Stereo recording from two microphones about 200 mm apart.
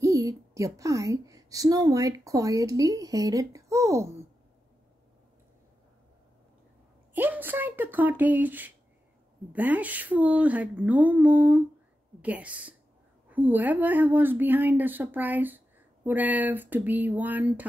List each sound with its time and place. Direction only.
0.0 s a woman's voice: 15° right (ahead or behind)
7.2 s a woman's voice: 10° right (ahead or behind)